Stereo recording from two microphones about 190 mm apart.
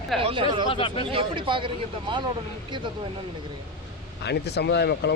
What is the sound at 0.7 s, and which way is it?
Speech, 30° left (ahead or behind).